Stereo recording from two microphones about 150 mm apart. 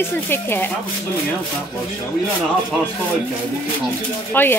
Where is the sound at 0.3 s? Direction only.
15° left (ahead or behind).